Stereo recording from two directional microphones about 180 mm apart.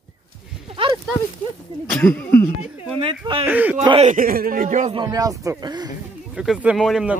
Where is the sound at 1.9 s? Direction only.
10° left (ahead or behind).